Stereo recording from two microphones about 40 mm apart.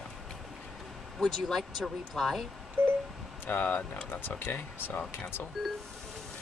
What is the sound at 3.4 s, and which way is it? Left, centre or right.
Speech, left.